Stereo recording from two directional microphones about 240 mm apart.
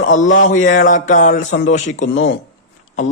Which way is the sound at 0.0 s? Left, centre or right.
Left.